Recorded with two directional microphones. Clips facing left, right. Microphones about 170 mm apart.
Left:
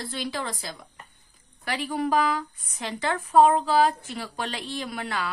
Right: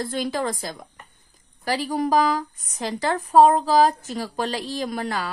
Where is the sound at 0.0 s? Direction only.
45° right (ahead or behind).